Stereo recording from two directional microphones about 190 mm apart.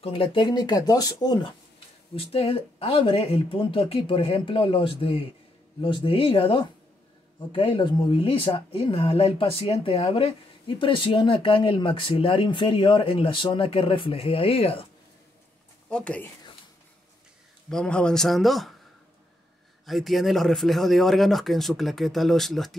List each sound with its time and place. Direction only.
0.0 s speech: 30° left (ahead or behind)
15.9 s speech: 5° left (ahead or behind)
17.6 s speech: 5° left (ahead or behind)
19.9 s speech: centre (ahead or behind)